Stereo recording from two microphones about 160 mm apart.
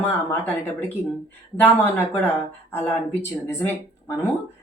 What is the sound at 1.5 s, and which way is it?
Speech, 10° left (ahead or behind).